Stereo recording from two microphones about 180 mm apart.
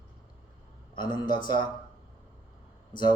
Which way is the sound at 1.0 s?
25° left (ahead or behind).